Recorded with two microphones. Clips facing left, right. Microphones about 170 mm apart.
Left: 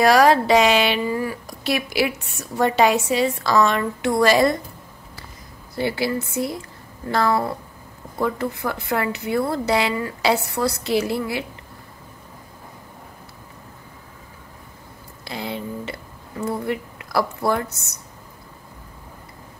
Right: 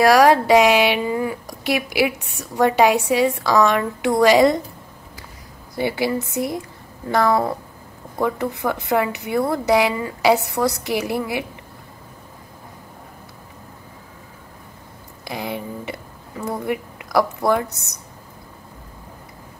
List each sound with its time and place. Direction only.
0.0 s speech: 10° right (ahead or behind)
5.8 s speech: 15° right (ahead or behind)
15.2 s a woman's voice: 15° right (ahead or behind)